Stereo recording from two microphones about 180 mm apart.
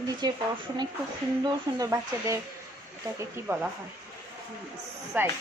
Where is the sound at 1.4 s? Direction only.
20° right (ahead or behind).